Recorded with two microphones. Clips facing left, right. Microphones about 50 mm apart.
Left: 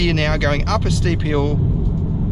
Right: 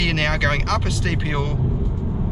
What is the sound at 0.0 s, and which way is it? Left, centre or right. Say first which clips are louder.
Speech: left 2 dB; centre.